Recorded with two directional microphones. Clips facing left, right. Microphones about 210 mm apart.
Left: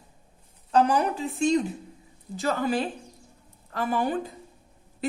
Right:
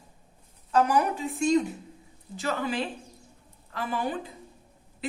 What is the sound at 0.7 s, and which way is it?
A man's voice, 30° left (ahead or behind).